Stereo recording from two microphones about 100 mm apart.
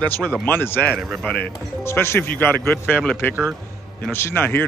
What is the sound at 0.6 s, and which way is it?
A man's voice, 20° left (ahead or behind).